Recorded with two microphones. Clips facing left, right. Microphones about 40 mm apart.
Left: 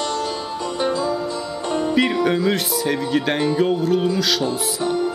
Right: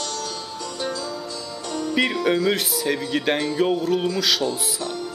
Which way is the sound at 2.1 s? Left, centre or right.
Centre.